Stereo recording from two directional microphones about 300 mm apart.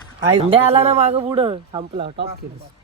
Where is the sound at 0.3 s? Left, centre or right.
Centre.